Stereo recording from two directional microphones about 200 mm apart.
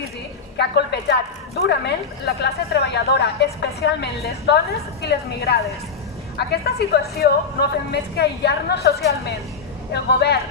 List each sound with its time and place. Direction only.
0.5 s a woman's voice: 55° left (ahead or behind)